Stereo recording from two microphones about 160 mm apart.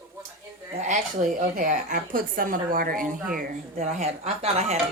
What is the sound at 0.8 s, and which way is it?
A woman's voice, 50° right (ahead or behind).